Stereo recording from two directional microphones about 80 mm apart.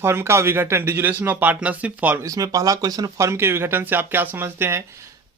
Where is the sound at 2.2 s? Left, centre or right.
Right.